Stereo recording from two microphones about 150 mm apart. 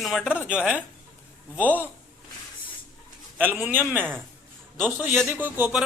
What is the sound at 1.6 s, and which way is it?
Speech, 10° left (ahead or behind).